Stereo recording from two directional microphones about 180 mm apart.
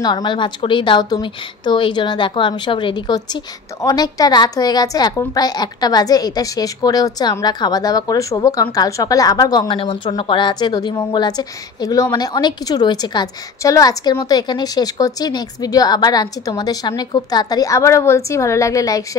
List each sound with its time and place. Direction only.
0.0 s a woman's voice: 25° left (ahead or behind)